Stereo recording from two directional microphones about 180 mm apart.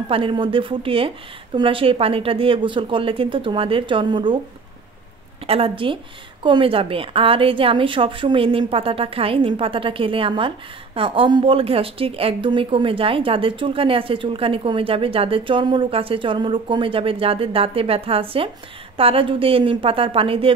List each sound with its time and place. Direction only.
0.1 s a woman's voice: 30° right (ahead or behind)
5.5 s a woman's voice: 30° right (ahead or behind)